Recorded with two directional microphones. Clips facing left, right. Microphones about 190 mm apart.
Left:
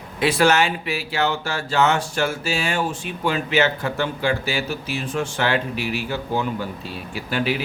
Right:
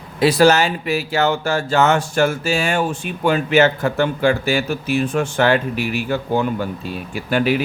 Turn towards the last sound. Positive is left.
turn(degrees=-50)  # may be behind; listen again after turning